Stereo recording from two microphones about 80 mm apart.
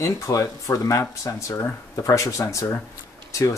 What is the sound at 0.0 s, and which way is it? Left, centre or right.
Speech, left.